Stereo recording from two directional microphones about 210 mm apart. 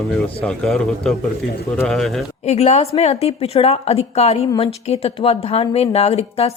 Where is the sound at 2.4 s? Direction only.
30° left (ahead or behind).